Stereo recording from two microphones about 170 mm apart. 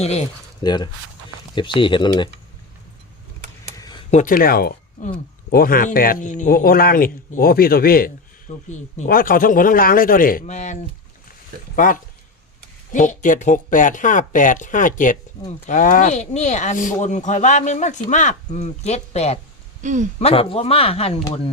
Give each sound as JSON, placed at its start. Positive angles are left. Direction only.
{"t": 0.0, "sound": "speech", "side_deg": 40}
{"t": 0.6, "sound": "speech", "side_deg": 25}
{"t": 3.8, "sound": "a sound", "side_deg": 25}
{"t": 4.1, "sound": "speech", "side_deg": 50}
{"t": 5.0, "sound": "speech", "side_deg": 50}
{"t": 10.4, "sound": "speech", "side_deg": 45}
{"t": 11.8, "sound": "speech", "side_deg": 50}
{"t": 19.8, "sound": "speech", "side_deg": -45}
{"t": 20.1, "sound": "speech", "side_deg": 35}